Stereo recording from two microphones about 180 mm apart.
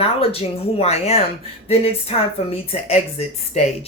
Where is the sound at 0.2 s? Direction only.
35° left (ahead or behind).